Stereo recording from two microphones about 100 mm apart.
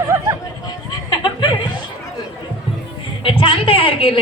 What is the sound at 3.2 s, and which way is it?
A man's voice, 60° left (ahead or behind).